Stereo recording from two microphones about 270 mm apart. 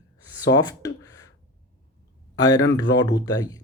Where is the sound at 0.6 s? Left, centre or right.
Centre.